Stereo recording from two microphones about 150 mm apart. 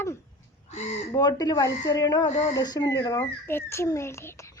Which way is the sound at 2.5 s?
25° left (ahead or behind).